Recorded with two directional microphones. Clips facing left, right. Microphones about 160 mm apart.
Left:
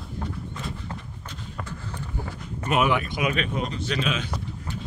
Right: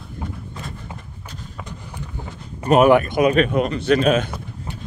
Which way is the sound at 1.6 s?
15° right (ahead or behind).